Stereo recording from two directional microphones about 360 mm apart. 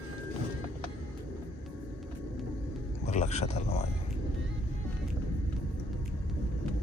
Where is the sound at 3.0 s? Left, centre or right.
Centre.